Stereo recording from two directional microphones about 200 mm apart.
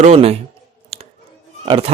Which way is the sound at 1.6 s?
30° right (ahead or behind).